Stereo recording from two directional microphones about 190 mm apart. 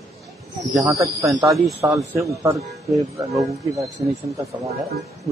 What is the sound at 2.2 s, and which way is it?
Speech, 15° right (ahead or behind).